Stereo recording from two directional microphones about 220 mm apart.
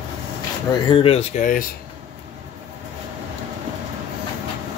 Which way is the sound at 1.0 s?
30° left (ahead or behind).